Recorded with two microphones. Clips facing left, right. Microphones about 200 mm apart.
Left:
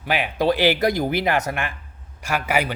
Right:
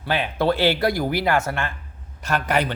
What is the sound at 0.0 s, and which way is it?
Speech, 15° left (ahead or behind).